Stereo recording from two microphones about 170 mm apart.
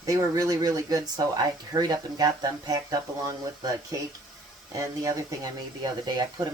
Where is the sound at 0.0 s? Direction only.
20° right (ahead or behind).